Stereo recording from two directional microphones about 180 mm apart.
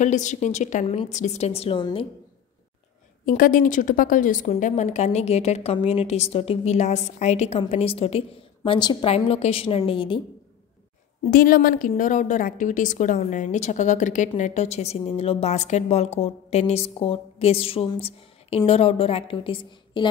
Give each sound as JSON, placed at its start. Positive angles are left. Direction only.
{"t": 0.0, "sound": "a woman's voice", "side_deg": 40}
{"t": 3.3, "sound": "a woman's voice", "side_deg": 50}
{"t": 11.2, "sound": "a woman's voice", "side_deg": 50}